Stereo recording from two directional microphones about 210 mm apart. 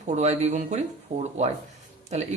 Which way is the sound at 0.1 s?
35° right (ahead or behind).